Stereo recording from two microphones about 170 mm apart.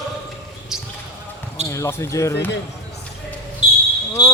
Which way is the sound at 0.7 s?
5° right (ahead or behind).